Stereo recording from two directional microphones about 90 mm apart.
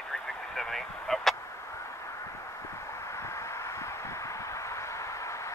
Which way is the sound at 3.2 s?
35° left (ahead or behind).